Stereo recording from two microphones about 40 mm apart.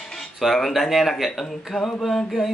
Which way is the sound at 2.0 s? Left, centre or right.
Centre.